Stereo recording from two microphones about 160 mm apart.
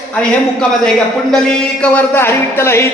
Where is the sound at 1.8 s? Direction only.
10° left (ahead or behind).